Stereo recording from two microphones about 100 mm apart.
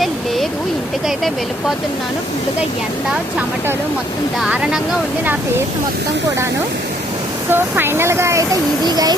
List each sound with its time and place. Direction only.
4.4 s speech: 5° right (ahead or behind)
7.5 s speech: 20° right (ahead or behind)
8.8 s a child's voice: 40° right (ahead or behind)